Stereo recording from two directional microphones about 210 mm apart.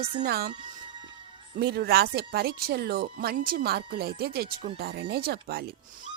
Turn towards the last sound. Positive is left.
turn(degrees=-50)  # may be behind; listen again after turning